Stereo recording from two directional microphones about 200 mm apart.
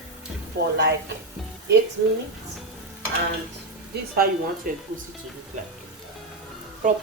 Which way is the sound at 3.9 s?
55° right (ahead or behind).